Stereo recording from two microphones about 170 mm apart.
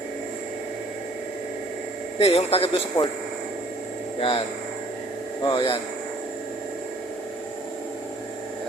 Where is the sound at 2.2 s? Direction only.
35° left (ahead or behind).